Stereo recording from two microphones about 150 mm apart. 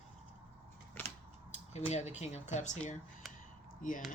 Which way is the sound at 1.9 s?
50° left (ahead or behind).